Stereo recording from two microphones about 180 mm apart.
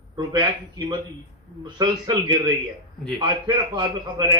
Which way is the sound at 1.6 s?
25° right (ahead or behind).